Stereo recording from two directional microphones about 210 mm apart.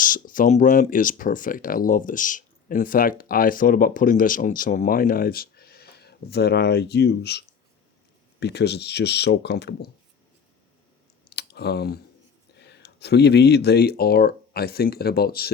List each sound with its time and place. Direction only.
0.0 s speech: 40° left (ahead or behind)
11.3 s clicking: 50° left (ahead or behind)
12.5 s speech: 55° left (ahead or behind)